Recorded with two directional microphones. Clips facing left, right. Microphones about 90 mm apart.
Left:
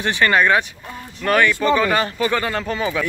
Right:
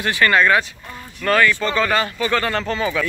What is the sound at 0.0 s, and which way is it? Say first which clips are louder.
Speech: even; 20° left (ahead or behind).